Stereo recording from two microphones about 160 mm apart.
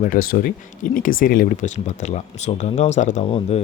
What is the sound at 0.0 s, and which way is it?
Speech, 60° left (ahead or behind).